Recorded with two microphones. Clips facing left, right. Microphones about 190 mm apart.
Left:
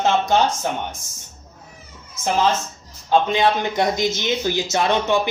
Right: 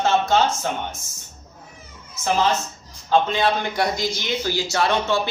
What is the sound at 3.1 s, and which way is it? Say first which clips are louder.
Speech: left 2 dB; 20° left (ahead or behind).